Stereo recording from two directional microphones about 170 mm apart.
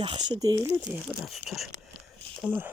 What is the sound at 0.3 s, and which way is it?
Speech, 20° right (ahead or behind).